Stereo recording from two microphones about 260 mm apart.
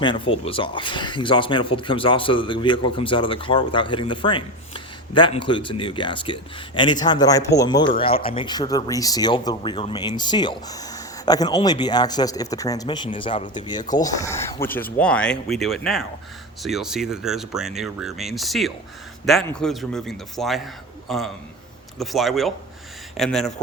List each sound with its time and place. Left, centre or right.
0.0 s speech: centre